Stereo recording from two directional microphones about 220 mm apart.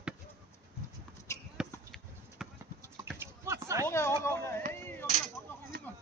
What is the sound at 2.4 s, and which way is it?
Clip-clop, centre (ahead or behind).